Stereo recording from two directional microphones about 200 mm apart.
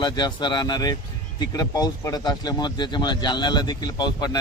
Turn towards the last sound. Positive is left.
turn(degrees=20)  # may be behind; listen again after turning